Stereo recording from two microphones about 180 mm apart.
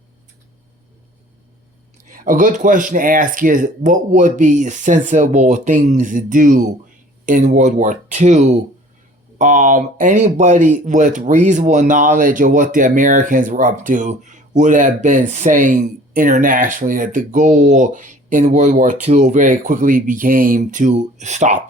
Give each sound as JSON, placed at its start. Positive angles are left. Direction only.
{"t": 2.1, "sound": "speech", "side_deg": -50}